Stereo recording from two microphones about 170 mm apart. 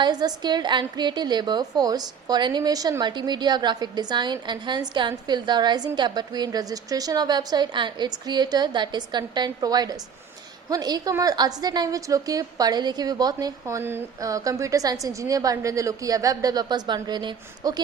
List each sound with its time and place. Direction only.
0.0 s a woman's voice: 25° right (ahead or behind)